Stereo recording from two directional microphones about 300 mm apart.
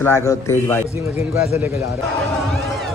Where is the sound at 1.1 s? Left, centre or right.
Left.